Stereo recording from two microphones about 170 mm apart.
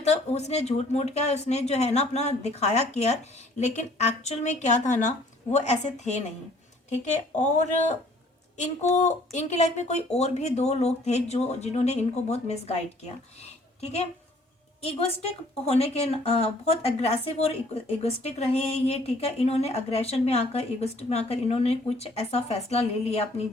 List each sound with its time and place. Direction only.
0.0 s speech: 40° left (ahead or behind)